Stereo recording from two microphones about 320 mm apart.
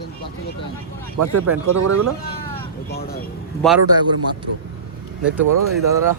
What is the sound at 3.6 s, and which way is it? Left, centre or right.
Speech, centre.